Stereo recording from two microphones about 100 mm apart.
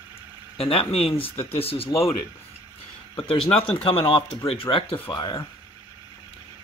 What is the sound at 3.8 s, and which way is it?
Speech, 65° left (ahead or behind).